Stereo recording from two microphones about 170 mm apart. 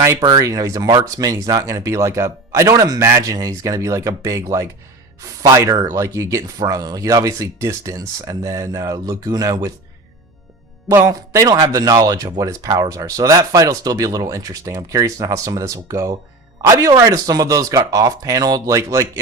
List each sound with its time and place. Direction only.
0.0 s speech: 20° right (ahead or behind)
10.8 s speech: 20° right (ahead or behind)